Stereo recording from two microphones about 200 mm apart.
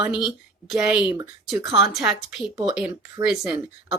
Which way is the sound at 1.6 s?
15° right (ahead or behind).